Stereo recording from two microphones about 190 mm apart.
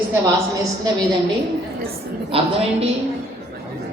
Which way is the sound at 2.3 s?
30° right (ahead or behind).